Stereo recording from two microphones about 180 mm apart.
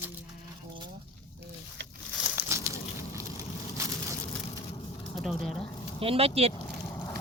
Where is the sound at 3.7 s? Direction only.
15° right (ahead or behind).